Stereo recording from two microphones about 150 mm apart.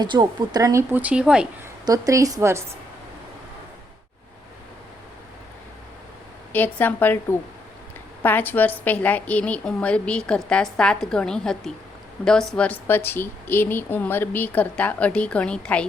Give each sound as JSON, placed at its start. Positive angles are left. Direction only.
{"t": 0.0, "sound": "a woman's voice", "side_deg": -30}
{"t": 1.8, "sound": "a woman's voice", "side_deg": -20}
{"t": 6.5, "sound": "a woman's voice", "side_deg": 10}